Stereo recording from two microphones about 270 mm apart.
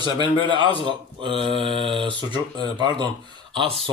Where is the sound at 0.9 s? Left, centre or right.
Centre.